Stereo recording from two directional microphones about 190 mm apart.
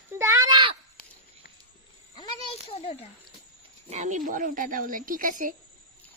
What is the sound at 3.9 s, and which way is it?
Speech, 40° right (ahead or behind).